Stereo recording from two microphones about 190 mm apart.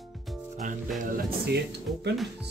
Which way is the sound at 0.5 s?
40° right (ahead or behind).